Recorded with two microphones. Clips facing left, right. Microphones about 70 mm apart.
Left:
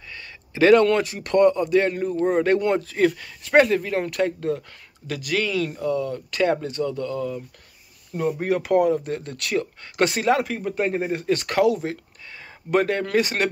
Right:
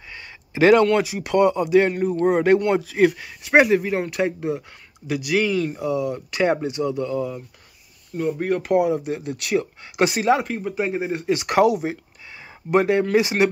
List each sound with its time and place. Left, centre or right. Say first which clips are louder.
0.1 s a sound: right 3 dB; right
0.7 s speech: right 1 dB; centre
8.4 s speech: right 1 dB; centre
8.7 s speech: even; centre